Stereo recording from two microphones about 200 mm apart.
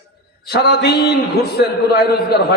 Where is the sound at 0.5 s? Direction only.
55° left (ahead or behind).